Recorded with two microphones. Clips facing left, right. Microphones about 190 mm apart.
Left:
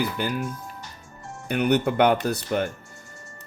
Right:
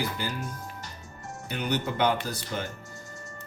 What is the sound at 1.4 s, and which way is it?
Speech, 60° left (ahead or behind).